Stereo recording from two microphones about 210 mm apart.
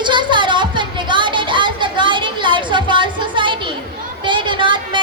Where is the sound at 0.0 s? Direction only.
20° right (ahead or behind).